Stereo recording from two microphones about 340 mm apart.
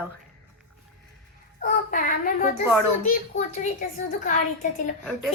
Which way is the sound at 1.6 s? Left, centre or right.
Left.